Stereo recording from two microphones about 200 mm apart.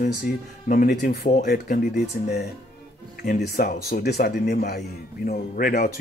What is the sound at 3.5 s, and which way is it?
Speech, 50° left (ahead or behind).